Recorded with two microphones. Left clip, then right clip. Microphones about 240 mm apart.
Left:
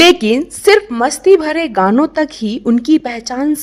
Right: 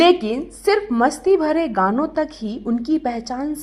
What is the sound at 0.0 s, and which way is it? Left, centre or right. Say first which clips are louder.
A woman's voice: left 6 dB; left.